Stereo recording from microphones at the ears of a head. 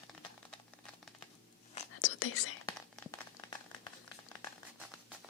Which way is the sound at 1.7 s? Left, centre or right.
Left.